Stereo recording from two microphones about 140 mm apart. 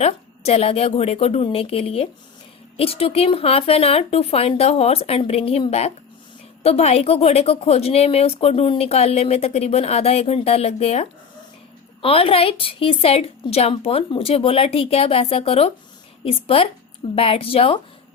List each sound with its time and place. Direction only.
0.0 s a woman's voice: 50° left (ahead or behind)